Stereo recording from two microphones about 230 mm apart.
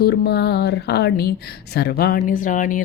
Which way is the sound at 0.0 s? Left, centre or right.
Left.